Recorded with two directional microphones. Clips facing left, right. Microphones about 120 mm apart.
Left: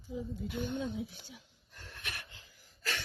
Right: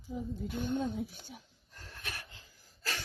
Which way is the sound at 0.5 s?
45° right (ahead or behind).